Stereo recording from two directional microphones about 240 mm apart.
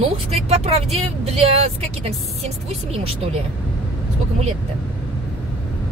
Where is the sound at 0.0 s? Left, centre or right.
Right.